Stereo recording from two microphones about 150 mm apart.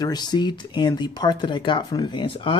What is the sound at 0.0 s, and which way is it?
Speech, 25° left (ahead or behind).